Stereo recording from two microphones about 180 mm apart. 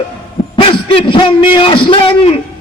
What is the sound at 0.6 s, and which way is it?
A man's voice, 30° left (ahead or behind).